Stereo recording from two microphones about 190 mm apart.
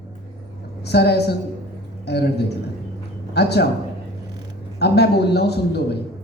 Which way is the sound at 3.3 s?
60° left (ahead or behind).